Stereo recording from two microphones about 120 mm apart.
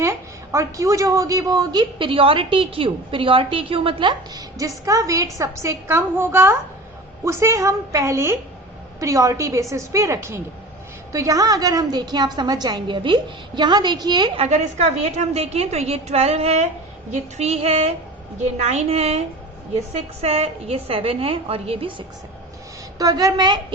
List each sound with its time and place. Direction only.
0.0 s a woman's voice: 25° right (ahead or behind); by 4.1 s 50° right (ahead or behind)
4.4 s a woman's voice: 30° right (ahead or behind)
14.3 s a woman's voice: 65° right (ahead or behind); by 22.0 s 45° right (ahead or behind)
23.0 s a woman's voice: 30° right (ahead or behind)